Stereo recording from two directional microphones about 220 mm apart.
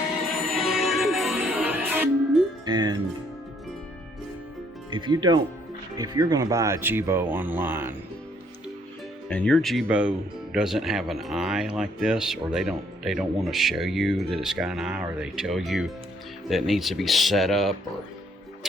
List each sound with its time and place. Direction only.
0.4 s music: centre (ahead or behind)
2.6 s music: 20° right (ahead or behind)
4.9 s speech: 20° right (ahead or behind)
9.3 s speech: 5° left (ahead or behind)